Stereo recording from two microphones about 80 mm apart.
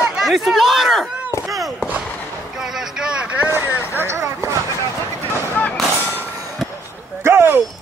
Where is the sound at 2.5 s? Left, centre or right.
Centre.